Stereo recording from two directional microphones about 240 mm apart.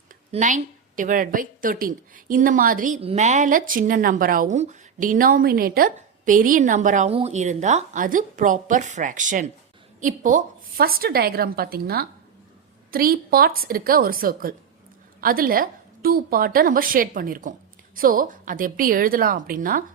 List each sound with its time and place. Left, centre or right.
0.3 s a woman's voice: right